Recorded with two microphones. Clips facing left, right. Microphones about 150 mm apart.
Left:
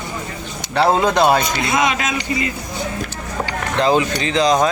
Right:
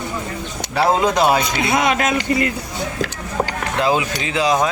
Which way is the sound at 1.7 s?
60° right (ahead or behind).